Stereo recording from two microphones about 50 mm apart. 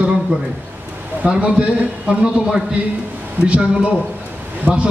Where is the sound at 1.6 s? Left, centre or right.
Centre.